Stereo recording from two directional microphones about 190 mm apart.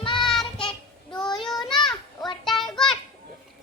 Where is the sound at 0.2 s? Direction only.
Centre (ahead or behind).